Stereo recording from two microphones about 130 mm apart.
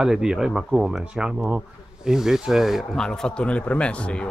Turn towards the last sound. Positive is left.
turn(degrees=10)  # may be behind; listen again after turning